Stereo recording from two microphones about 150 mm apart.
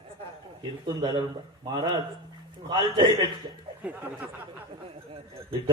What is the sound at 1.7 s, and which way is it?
Music, 30° right (ahead or behind).